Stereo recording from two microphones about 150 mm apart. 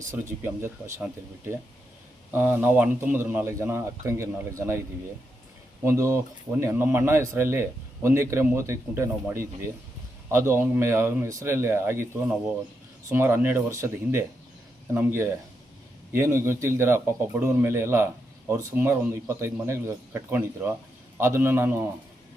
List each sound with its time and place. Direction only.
0.1 s speech: 15° right (ahead or behind)
2.3 s speech: 15° right (ahead or behind)
5.8 s speech: 20° right (ahead or behind)